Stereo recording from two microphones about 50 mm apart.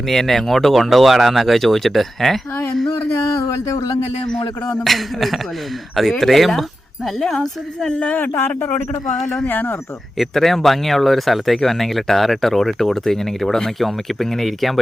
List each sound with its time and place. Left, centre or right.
0.1 s speech: centre
4.8 s speech: centre
7.9 s speech: left
8.4 s a man's voice: left
10.2 s speech: centre